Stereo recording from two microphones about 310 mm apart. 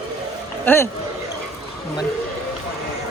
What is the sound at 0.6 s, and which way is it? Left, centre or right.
Speech, centre.